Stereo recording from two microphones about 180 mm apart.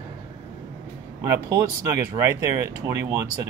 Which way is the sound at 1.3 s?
15° right (ahead or behind).